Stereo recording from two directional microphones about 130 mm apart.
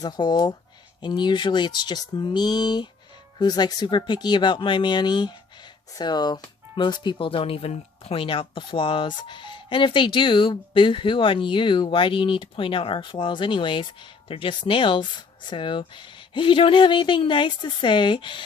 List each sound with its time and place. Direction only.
0.0 s speech: 35° left (ahead or behind)